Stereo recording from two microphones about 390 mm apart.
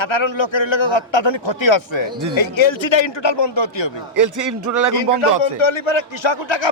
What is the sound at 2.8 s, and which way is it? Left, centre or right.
Speech, left.